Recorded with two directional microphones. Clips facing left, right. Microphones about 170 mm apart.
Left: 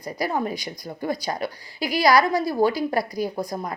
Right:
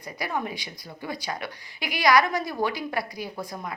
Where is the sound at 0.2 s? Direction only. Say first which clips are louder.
Left 5 dB; 35° left (ahead or behind).